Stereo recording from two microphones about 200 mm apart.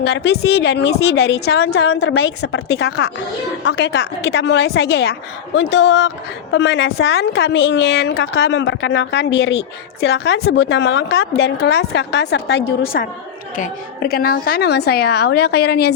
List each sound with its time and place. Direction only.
0.0 s a woman's voice: 55° left (ahead or behind); by 2.6 s 80° left
2.6 s a woman's voice: 55° left (ahead or behind)